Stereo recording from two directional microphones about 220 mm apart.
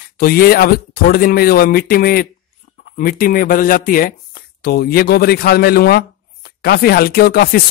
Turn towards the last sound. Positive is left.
turn(degrees=45)  # may be behind; listen again after turning